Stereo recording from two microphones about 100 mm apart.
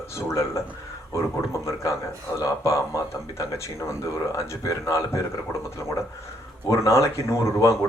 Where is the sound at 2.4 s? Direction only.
30° left (ahead or behind).